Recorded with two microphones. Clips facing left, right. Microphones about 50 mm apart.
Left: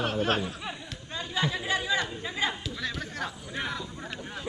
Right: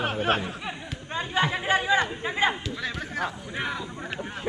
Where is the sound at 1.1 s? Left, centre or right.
Right.